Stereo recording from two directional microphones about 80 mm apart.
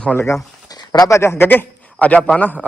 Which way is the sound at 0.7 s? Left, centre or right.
Left.